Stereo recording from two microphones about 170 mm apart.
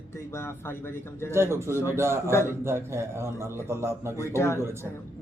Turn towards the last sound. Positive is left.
turn(degrees=-15)  # may be behind; listen again after turning